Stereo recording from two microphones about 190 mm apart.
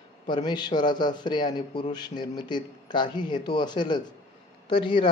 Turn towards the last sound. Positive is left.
turn(degrees=25)  # may be behind; listen again after turning